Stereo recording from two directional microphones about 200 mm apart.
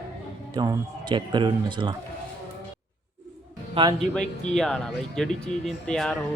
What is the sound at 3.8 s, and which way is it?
Speech, 25° right (ahead or behind).